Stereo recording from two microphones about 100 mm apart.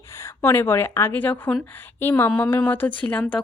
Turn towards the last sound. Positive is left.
turn(degrees=15)  # may be behind; listen again after turning